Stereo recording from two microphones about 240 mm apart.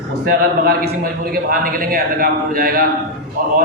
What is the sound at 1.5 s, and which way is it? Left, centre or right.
A man's voice, right.